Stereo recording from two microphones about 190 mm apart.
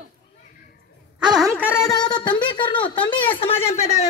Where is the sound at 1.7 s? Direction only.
15° left (ahead or behind); by 4.0 s 35° left (ahead or behind).